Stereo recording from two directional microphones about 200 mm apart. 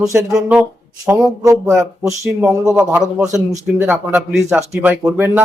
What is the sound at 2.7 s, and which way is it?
Speech, 10° right (ahead or behind).